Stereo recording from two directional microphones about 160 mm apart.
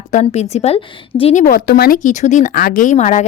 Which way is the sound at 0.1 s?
45° left (ahead or behind).